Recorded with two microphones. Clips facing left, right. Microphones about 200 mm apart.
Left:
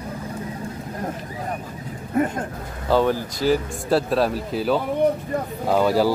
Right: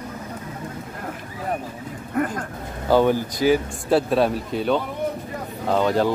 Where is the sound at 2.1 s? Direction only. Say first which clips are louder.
Left 2 dB; 25° left (ahead or behind).